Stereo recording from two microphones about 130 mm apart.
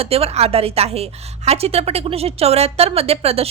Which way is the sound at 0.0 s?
50° right (ahead or behind).